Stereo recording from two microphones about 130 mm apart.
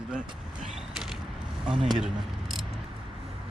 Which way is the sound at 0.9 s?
5° right (ahead or behind).